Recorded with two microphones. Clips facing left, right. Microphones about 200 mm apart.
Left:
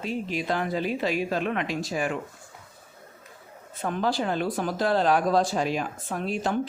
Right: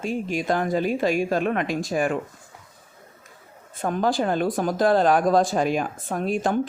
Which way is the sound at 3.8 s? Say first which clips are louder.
Right 4 dB; 45° right (ahead or behind).